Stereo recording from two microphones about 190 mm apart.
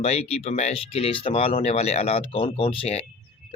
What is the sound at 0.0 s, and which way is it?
Speech, 35° left (ahead or behind).